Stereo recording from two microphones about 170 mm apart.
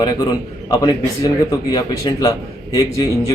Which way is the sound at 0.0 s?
25° left (ahead or behind).